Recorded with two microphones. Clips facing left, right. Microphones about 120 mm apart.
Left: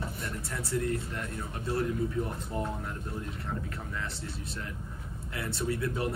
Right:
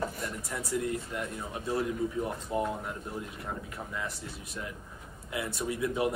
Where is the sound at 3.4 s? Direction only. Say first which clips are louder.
Left 1 dB; 10° right (ahead or behind).